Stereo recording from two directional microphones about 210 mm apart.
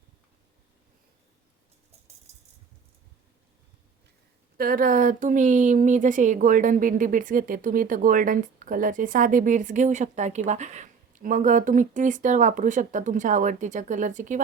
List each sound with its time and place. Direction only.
4.5 s speech: 45° right (ahead or behind)